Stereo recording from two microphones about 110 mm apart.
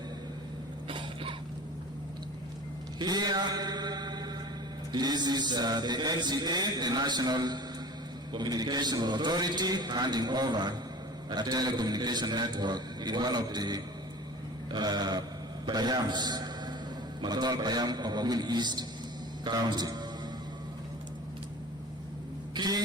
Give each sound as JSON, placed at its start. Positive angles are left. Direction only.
{"t": 0.9, "sound": "cough", "side_deg": -50}
{"t": 3.0, "sound": "mantra", "side_deg": -40}
{"t": 4.9, "sound": "a man's voice", "side_deg": -40}
{"t": 22.5, "sound": "a sound", "side_deg": -40}